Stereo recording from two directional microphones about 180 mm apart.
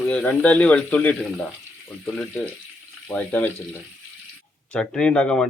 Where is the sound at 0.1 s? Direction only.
5° left (ahead or behind).